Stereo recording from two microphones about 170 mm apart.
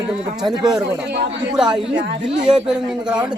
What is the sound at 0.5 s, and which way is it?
Speech, 25° right (ahead or behind).